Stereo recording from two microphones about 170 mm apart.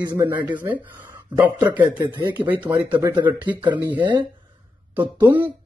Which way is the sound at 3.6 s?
25° right (ahead or behind).